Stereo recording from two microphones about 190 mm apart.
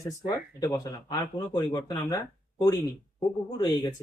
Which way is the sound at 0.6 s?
20° left (ahead or behind).